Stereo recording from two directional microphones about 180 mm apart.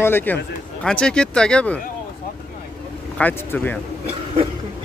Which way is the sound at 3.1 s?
10° left (ahead or behind).